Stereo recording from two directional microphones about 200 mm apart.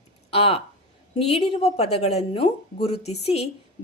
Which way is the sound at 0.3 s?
30° left (ahead or behind).